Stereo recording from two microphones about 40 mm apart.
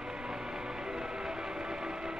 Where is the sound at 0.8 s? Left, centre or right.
Centre.